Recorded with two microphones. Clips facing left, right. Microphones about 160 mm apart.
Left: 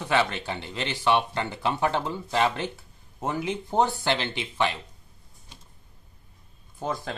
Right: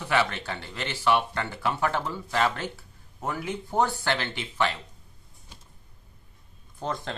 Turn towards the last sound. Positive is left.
turn(degrees=5)  # may be behind; listen again after turning